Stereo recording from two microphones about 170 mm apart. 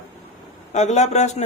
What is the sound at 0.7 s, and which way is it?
Speech, 40° left (ahead or behind).